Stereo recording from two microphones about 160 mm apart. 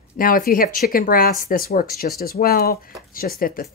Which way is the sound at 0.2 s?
60° left (ahead or behind).